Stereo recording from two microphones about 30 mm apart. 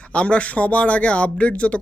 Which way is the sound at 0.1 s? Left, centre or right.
Left.